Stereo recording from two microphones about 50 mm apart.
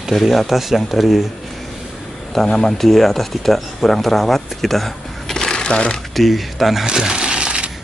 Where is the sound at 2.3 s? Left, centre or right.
Centre.